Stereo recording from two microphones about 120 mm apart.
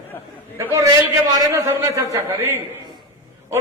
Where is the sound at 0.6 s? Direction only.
20° right (ahead or behind).